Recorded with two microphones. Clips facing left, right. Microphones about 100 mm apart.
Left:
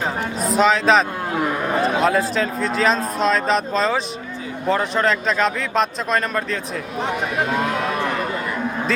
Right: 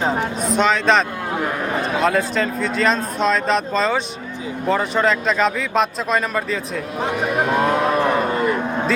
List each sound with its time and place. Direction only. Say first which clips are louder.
0.4 s speech: left 2 dB; centre (ahead or behind)
7.5 s speech: right 6 dB; 40° right (ahead or behind)